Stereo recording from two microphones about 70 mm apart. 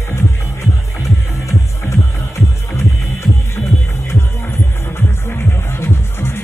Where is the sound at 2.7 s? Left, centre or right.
Left.